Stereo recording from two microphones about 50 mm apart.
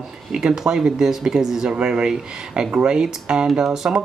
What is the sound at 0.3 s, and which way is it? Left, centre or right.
Speech, centre.